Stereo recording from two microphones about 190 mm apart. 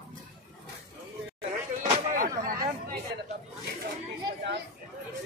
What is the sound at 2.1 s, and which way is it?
Chatter, 45° right (ahead or behind).